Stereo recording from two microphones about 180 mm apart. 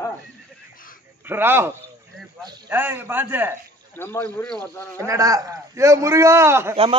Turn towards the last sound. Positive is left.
turn(degrees=-15)  # may be behind; listen again after turning